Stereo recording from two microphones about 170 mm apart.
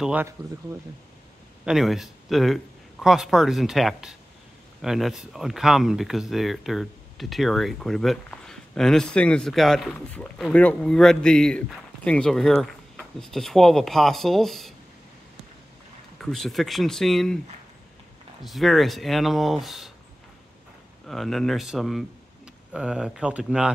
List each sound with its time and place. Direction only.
0.0 s speech: 10° right (ahead or behind)
1.7 s speech: centre (ahead or behind)
16.2 s speech: centre (ahead or behind)
18.4 s speech: centre (ahead or behind)
21.1 s speech: centre (ahead or behind)